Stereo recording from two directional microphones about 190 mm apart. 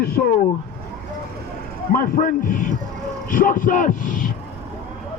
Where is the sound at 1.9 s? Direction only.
45° left (ahead or behind).